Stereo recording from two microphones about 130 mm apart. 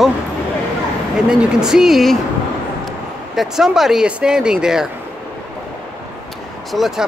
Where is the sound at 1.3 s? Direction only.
5° right (ahead or behind).